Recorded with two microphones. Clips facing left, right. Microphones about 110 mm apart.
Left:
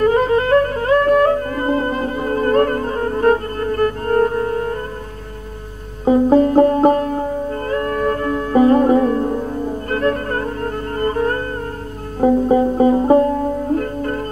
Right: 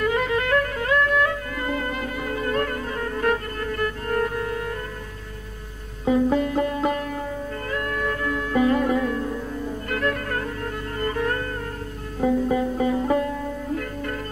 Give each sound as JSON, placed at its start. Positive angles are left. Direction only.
{"t": 0.0, "sound": "music", "side_deg": 35}
{"t": 6.0, "sound": "music", "side_deg": 35}
{"t": 12.2, "sound": "banjo", "side_deg": 40}